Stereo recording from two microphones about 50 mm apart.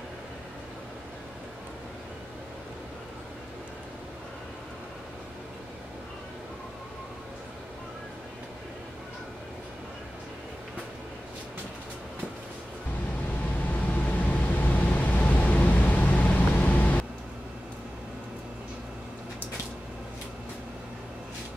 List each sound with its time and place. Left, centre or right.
13.7 s vehicle: left